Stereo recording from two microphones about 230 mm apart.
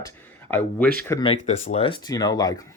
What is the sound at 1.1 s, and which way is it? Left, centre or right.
Speech, left.